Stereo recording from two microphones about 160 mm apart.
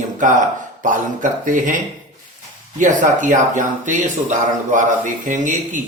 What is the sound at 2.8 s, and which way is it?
Speech, 55° right (ahead or behind).